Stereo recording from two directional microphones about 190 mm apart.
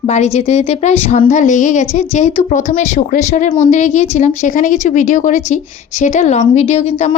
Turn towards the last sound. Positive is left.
turn(degrees=35)  # may be behind; listen again after turning